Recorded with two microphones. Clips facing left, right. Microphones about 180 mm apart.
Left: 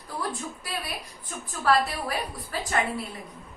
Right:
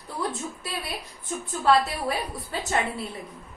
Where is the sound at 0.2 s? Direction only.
25° right (ahead or behind).